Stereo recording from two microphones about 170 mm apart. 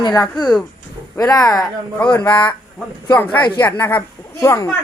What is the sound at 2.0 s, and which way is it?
Speech, 10° left (ahead or behind).